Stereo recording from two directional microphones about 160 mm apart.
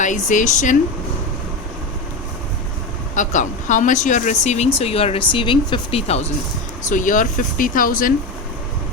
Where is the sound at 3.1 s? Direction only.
50° left (ahead or behind).